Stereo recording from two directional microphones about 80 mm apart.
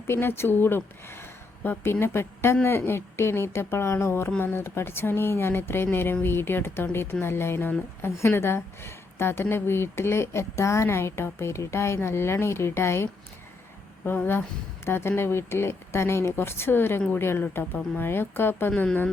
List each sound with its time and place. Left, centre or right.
0.1 s a woman's voice: left